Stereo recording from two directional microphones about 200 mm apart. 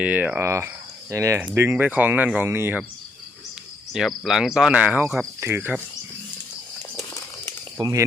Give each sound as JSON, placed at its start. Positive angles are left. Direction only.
{"t": 0.0, "sound": "speech", "side_deg": -5}
{"t": 3.9, "sound": "cricket", "side_deg": 0}
{"t": 5.4, "sound": "speech", "side_deg": -10}
{"t": 6.9, "sound": "crumpling", "side_deg": 15}
{"t": 7.8, "sound": "speech", "side_deg": -15}